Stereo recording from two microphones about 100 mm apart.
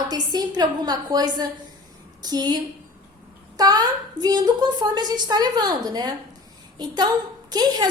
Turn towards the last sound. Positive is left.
turn(degrees=-40)  # may be behind; listen again after turning